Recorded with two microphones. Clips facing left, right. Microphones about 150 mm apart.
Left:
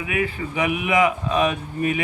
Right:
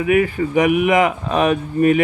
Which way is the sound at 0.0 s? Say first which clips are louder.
Right 9 dB; 45° right (ahead or behind).